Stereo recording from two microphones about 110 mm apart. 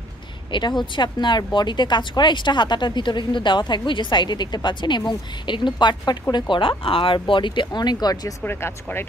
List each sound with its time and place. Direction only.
0.5 s speech: 45° left (ahead or behind)
8.5 s speech: 20° left (ahead or behind)